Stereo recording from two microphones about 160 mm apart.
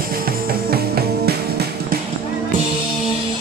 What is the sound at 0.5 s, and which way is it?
Music, 75° right (ahead or behind).